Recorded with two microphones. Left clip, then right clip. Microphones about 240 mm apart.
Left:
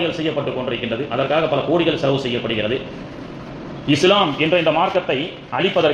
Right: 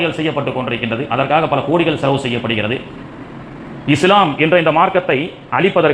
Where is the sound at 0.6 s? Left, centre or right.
Right.